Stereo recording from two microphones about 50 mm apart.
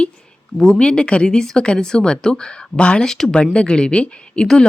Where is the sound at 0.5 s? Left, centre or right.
Centre.